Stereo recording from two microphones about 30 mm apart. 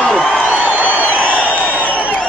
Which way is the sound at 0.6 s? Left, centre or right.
Right.